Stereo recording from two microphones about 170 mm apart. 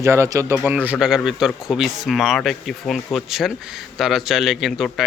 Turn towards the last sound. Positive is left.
turn(degrees=0)  # may be behind; listen again after turning